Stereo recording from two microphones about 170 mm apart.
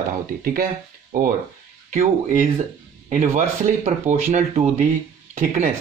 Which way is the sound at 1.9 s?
50° right (ahead or behind).